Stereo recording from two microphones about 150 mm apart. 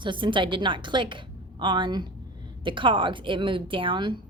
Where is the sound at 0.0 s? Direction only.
35° right (ahead or behind).